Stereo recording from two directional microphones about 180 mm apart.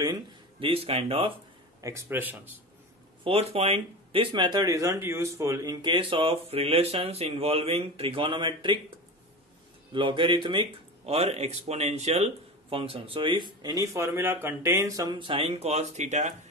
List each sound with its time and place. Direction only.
0.0 s speech: 25° right (ahead or behind)
1.8 s speech: 15° right (ahead or behind)
3.3 s speech: 35° right (ahead or behind)
9.9 s speech: 30° right (ahead or behind)